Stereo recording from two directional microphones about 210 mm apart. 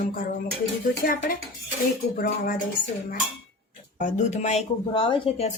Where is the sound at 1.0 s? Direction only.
45° left (ahead or behind).